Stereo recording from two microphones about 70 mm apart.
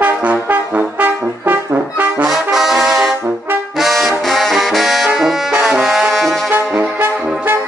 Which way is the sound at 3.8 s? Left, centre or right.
Centre.